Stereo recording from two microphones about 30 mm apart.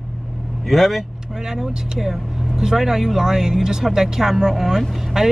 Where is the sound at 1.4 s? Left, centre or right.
Centre.